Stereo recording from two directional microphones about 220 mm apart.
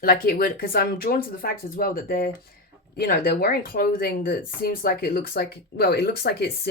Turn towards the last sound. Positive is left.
turn(degrees=45)  # may be behind; listen again after turning